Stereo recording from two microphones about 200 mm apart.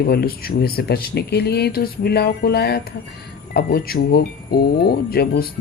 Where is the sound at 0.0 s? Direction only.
50° left (ahead or behind).